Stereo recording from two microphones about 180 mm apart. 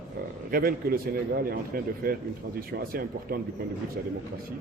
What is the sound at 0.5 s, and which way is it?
A man's voice, 55° right (ahead or behind).